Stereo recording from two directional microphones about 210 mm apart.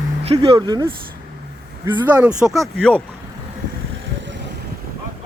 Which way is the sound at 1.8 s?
5° right (ahead or behind).